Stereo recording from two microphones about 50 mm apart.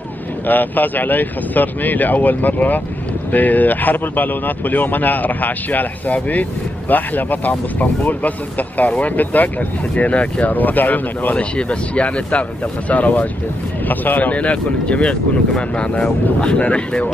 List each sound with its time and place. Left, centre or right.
0.5 s speech: left
11.3 s speech: left